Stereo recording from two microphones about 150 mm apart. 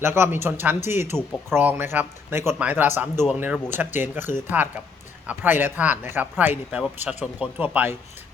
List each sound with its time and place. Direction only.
0.0 s speech: 15° right (ahead or behind)